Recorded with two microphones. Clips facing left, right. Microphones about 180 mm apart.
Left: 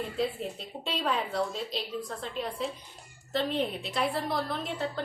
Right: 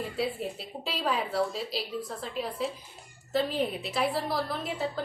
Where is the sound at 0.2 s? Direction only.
5° right (ahead or behind).